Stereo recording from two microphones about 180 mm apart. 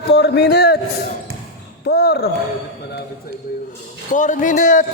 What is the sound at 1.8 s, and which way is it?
Speech, 65° left (ahead or behind).